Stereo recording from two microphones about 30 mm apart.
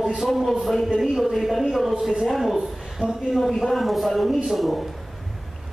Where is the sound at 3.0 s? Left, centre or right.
Right.